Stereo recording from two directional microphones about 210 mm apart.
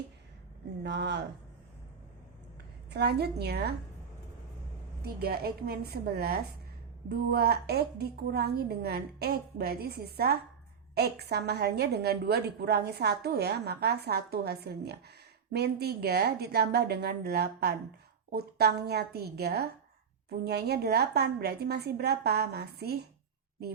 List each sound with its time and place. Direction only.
0.9 s speech: 55° right (ahead or behind)
2.9 s a woman's voice: 50° right (ahead or behind)
5.0 s a woman's voice: 50° right (ahead or behind)